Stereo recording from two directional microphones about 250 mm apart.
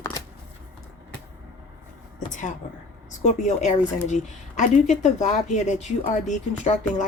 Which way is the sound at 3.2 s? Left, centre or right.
Left.